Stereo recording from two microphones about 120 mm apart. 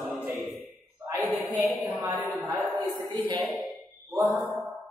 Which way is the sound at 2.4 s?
5° right (ahead or behind).